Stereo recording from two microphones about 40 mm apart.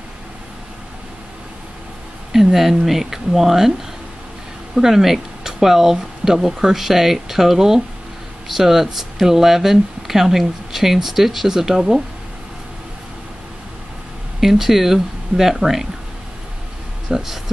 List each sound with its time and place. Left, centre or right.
2.3 s speech: centre
4.7 s speech: centre
14.4 s speech: centre
17.1 s speech: centre